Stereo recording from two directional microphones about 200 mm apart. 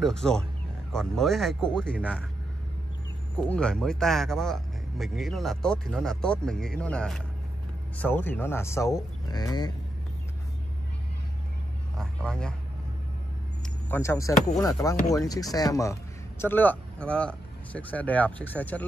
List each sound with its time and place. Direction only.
0.0 s speech: 5° left (ahead or behind)
3.3 s speech: 5° left (ahead or behind)
12.0 s a man's voice: 5° left (ahead or behind)
13.8 s speech: 10° left (ahead or behind)